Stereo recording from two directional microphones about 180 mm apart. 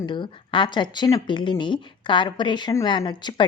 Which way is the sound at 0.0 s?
25° left (ahead or behind).